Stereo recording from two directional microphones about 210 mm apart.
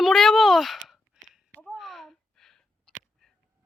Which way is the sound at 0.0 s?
Centre (ahead or behind).